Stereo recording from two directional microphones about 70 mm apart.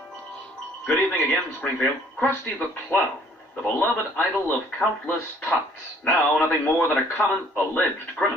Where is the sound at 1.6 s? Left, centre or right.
Centre.